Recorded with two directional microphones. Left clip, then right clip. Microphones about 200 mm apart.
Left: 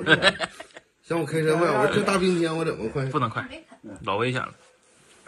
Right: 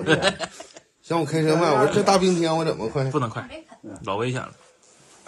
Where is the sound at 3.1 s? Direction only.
15° right (ahead or behind).